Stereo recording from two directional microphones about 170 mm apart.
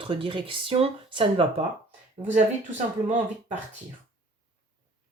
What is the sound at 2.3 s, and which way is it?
Speech, 45° right (ahead or behind).